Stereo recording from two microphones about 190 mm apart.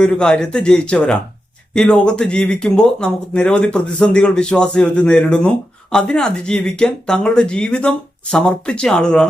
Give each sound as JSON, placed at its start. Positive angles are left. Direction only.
{"t": 0.0, "sound": "speech", "side_deg": 5}